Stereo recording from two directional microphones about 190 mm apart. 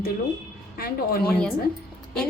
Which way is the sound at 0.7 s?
55° left (ahead or behind).